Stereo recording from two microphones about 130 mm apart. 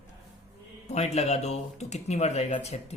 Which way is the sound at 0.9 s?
55° left (ahead or behind).